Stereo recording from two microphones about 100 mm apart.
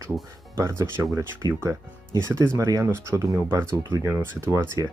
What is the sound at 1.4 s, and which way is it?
Speech, 35° right (ahead or behind).